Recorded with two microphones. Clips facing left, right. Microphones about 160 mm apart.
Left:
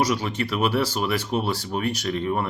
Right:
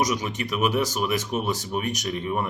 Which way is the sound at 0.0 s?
15° right (ahead or behind).